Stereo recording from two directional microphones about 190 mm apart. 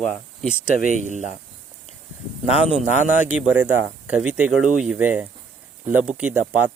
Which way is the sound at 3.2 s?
5° right (ahead or behind).